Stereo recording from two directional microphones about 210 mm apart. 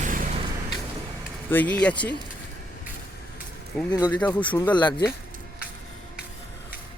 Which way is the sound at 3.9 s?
20° left (ahead or behind).